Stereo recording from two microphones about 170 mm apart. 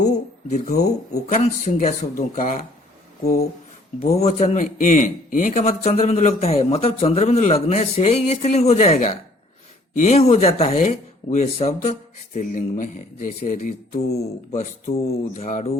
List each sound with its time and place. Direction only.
0.5 s speech: 45° left (ahead or behind)
4.0 s speech: 40° left (ahead or behind)